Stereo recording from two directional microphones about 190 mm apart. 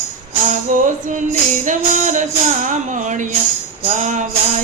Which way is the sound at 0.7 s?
45° right (ahead or behind).